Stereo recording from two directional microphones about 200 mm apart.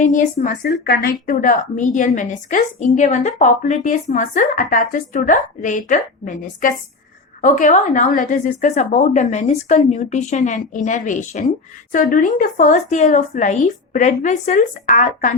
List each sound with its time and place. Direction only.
0.0 s a woman's voice: 40° left (ahead or behind)
0.7 s a woman's voice: 50° left (ahead or behind)